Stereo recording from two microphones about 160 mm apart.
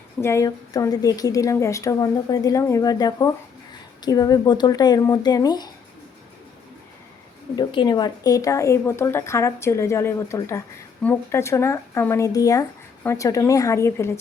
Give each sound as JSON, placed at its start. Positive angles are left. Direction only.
{"t": 0.2, "sound": "a woman's voice", "side_deg": 15}
{"t": 7.5, "sound": "speech", "side_deg": 30}